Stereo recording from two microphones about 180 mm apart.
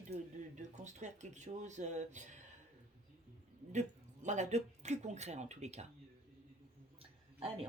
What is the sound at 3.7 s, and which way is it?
Speech, 40° right (ahead or behind).